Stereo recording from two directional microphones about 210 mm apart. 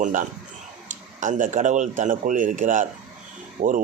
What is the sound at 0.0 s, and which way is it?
Speech, 35° right (ahead or behind).